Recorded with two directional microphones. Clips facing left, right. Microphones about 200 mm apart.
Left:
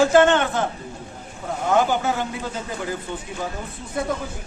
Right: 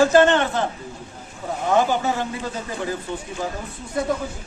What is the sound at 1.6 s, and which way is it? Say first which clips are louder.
Speech: even; centre (ahead or behind).